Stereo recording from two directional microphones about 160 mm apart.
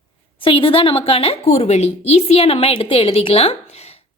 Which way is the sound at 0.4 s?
35° left (ahead or behind).